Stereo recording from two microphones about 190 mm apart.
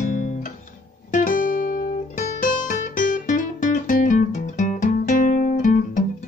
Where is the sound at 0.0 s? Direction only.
45° left (ahead or behind).